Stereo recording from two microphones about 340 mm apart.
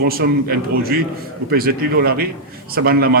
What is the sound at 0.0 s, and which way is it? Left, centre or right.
A man's voice, right.